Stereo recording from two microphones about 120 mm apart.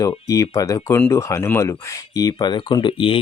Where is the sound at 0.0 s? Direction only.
30° left (ahead or behind).